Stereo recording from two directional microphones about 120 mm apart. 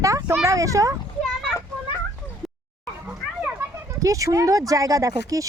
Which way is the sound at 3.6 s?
25° right (ahead or behind).